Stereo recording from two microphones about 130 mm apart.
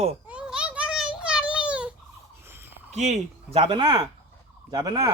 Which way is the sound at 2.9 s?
65° right (ahead or behind).